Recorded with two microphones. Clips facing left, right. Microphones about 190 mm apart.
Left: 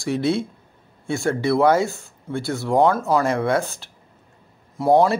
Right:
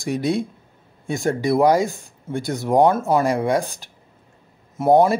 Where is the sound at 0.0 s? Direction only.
15° right (ahead or behind).